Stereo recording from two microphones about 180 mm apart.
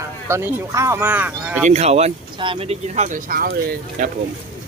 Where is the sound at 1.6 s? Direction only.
35° right (ahead or behind).